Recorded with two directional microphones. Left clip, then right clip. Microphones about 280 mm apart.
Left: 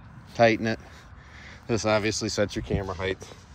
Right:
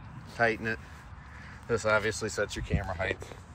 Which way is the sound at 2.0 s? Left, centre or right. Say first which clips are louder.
Left 4 dB; centre.